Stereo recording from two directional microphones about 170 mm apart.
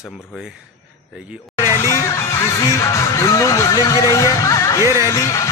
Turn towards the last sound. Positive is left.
turn(degrees=20)  # may be behind; listen again after turning